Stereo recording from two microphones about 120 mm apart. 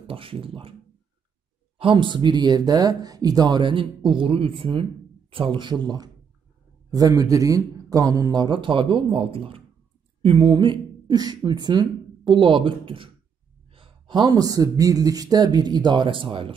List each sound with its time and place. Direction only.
0.0 s speech: 50° right (ahead or behind)
1.8 s speech: 45° right (ahead or behind)